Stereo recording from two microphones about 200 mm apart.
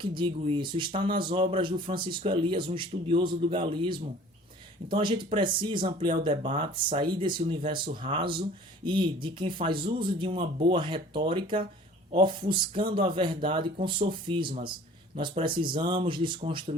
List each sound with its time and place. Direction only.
0.2 s a man's voice: 25° right (ahead or behind)